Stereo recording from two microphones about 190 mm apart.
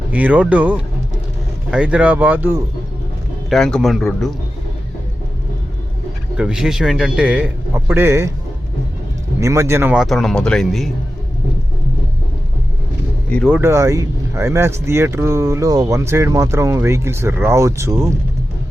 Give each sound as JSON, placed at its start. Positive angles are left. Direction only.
{"t": 0.1, "sound": "speech", "side_deg": -10}
{"t": 3.5, "sound": "a man's voice", "side_deg": 0}
{"t": 6.3, "sound": "a man's voice", "side_deg": -5}
{"t": 9.4, "sound": "a man's voice", "side_deg": -15}
{"t": 13.5, "sound": "speech", "side_deg": -10}